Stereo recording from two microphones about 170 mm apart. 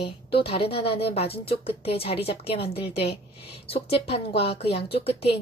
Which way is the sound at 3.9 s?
35° left (ahead or behind).